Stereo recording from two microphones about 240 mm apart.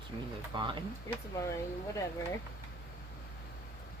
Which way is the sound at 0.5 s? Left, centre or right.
Centre.